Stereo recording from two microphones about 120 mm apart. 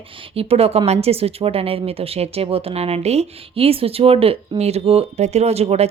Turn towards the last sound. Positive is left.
turn(degrees=-60)  # may be behind; listen again after turning